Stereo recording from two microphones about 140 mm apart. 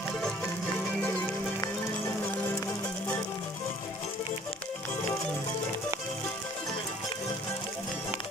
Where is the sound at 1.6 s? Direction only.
20° left (ahead or behind).